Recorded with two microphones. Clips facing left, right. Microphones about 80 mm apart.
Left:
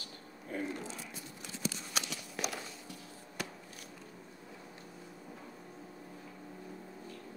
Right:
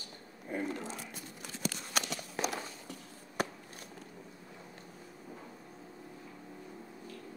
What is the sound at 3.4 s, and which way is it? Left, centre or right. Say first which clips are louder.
Chop: right 7 dB; right.